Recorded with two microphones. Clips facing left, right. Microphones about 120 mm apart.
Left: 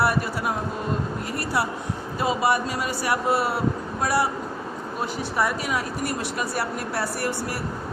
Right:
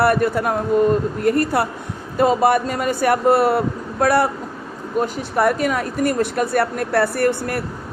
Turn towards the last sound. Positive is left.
turn(degrees=-55)  # may be behind; listen again after turning